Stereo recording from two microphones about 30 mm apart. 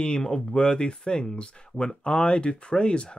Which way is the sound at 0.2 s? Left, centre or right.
Left.